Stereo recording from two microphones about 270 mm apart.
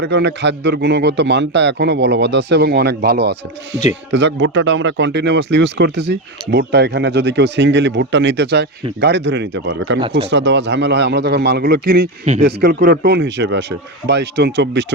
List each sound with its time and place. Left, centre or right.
0.0 s speech: right